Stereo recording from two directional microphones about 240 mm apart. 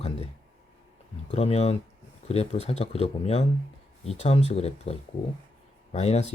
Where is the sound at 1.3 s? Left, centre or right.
Left.